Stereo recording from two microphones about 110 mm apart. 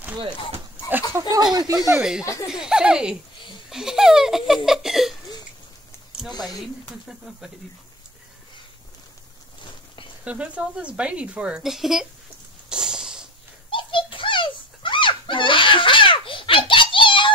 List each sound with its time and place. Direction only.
1.3 s speech: 40° right (ahead or behind)
2.0 s speech: 5° right (ahead or behind)
2.2 s speech: 30° left (ahead or behind)
2.5 s speech: 5° right (ahead or behind)
4.6 s a sound: centre (ahead or behind)
7.1 s speech: 5° right (ahead or behind)
10.2 s speech: 10° right (ahead or behind)
12.6 s a sound: 5° right (ahead or behind)
13.7 s dog: 50° left (ahead or behind)